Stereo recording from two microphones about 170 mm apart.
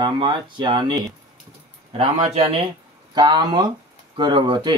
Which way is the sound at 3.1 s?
25° right (ahead or behind).